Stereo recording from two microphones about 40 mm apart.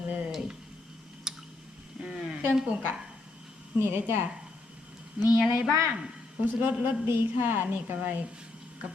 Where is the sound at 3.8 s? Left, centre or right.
Right.